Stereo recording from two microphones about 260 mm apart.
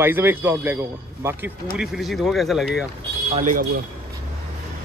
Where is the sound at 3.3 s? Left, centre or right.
Right.